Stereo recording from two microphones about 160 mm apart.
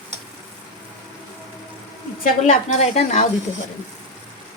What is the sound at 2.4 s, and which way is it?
Speech, 45° left (ahead or behind).